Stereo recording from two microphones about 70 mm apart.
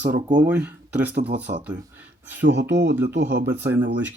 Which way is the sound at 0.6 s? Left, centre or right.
Right.